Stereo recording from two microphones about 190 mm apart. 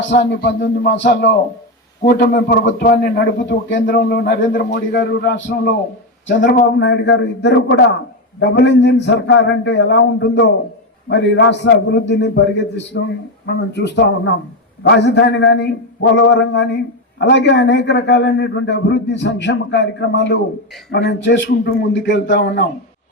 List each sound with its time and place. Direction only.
0.2 s a man's voice: 65° left (ahead or behind)
2.0 s a man's voice: 50° left (ahead or behind); by 3.8 s 65° left (ahead or behind)
3.8 s a man's voice: 55° left (ahead or behind)
6.4 s a man's voice: 45° left (ahead or behind)
6.7 s a man's voice: 65° left (ahead or behind)